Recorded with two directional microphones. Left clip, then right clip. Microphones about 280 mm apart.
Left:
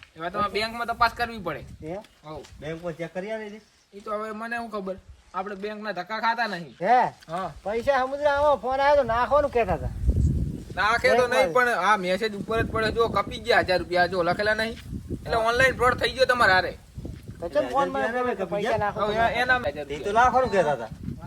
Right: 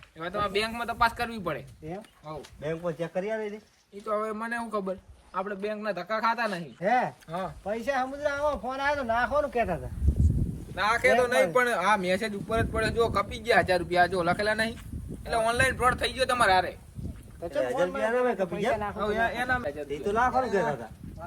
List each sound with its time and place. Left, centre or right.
0.2 s speech: centre
6.8 s speech: centre
7.3 s speech: centre
7.6 s speech: centre
10.8 s speech: centre
17.6 s speech: centre
18.8 s speech: centre